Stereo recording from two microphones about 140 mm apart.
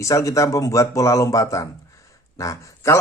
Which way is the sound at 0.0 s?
25° left (ahead or behind).